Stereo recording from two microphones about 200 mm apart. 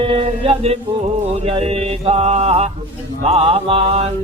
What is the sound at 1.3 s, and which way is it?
Mantra, 30° right (ahead or behind).